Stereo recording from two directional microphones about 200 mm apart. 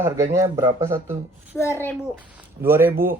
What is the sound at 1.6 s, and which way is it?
Speech, 15° left (ahead or behind).